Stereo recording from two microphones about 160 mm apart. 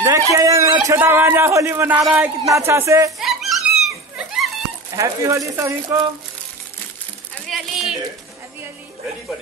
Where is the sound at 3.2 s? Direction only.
Centre (ahead or behind).